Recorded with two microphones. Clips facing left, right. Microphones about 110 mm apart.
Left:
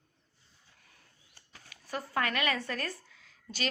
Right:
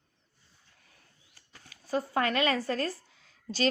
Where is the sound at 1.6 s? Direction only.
30° right (ahead or behind).